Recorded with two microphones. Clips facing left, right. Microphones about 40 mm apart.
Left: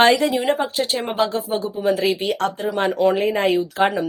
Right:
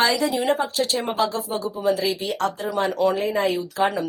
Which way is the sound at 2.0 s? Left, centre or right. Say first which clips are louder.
Left 3 dB; left.